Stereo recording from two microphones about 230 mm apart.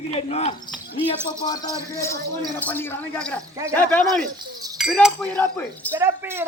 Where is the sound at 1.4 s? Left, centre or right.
Centre.